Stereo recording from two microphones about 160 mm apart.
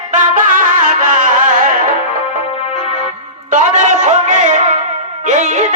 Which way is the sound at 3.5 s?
50° right (ahead or behind).